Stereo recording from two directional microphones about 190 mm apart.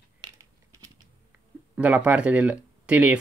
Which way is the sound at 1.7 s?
5° right (ahead or behind).